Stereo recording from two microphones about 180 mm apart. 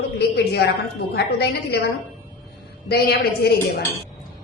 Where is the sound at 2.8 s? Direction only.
60° left (ahead or behind).